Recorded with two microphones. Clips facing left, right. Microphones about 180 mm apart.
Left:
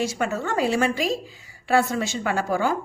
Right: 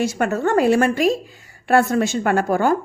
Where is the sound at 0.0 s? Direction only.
55° right (ahead or behind).